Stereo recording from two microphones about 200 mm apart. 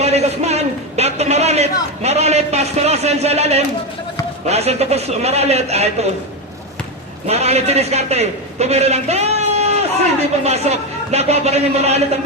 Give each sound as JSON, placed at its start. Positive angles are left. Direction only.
{"t": 0.0, "sound": "a man's voice", "side_deg": -30}
{"t": 7.3, "sound": "a man's voice", "side_deg": -30}